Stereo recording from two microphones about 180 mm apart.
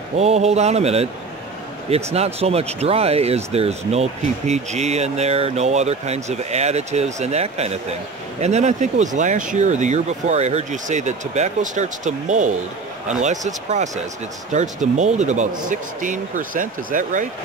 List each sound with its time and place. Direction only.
0.2 s speech: 35° right (ahead or behind)
2.1 s speech: 35° right (ahead or behind)